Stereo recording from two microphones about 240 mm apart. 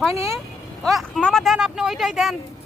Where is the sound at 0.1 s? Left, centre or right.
Centre.